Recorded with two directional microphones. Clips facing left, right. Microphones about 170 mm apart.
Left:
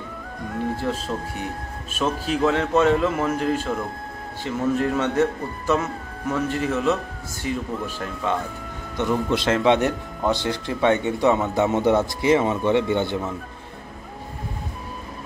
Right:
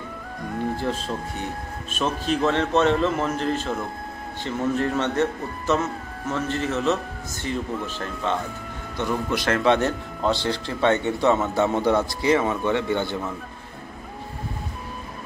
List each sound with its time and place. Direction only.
0.6 s speech: centre (ahead or behind)
8.9 s speech: 20° left (ahead or behind)